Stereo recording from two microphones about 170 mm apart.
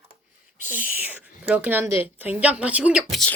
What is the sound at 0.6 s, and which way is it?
Speech, 50° left (ahead or behind).